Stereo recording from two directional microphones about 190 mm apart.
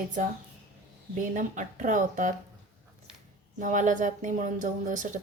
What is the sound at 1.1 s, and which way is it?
Speech, 40° right (ahead or behind).